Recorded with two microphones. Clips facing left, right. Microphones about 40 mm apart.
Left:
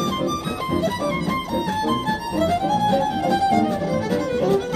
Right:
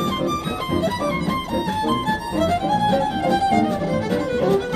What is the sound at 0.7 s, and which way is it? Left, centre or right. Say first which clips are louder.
Music: right 1 dB; right.